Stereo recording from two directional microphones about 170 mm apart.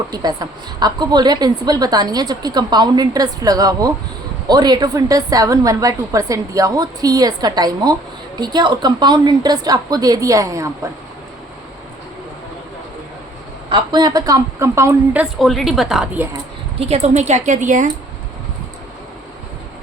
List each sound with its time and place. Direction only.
0.1 s a woman's voice: 25° right (ahead or behind)
13.7 s speech: 25° right (ahead or behind); by 16.2 s centre (ahead or behind)
16.8 s a woman's voice: 40° right (ahead or behind)